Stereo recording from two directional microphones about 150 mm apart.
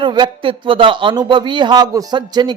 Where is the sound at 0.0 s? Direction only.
30° right (ahead or behind).